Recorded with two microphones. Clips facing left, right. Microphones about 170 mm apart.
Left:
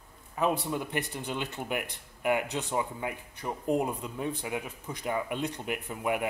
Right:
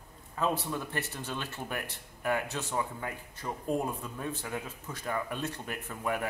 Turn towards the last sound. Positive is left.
turn(degrees=15)  # may be behind; listen again after turning